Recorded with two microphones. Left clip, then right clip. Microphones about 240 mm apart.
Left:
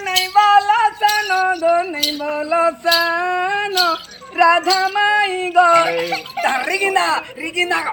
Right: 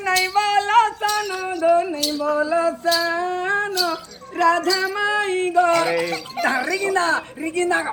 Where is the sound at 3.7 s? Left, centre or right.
Centre.